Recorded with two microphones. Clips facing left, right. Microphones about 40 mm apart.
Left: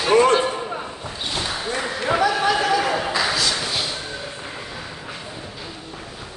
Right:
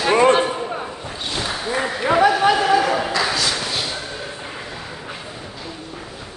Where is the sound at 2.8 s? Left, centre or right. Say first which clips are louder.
Right 2 dB; centre.